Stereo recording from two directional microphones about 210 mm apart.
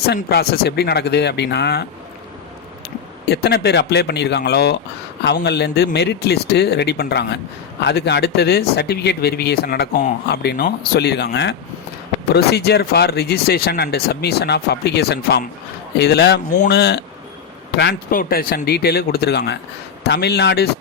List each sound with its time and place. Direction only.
0.0 s speech: 50° left (ahead or behind)
3.2 s speech: 50° left (ahead or behind)
18.2 s speech: 45° left (ahead or behind)